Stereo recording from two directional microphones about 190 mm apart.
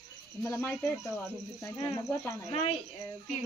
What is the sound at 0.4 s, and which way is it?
Speech, 15° left (ahead or behind).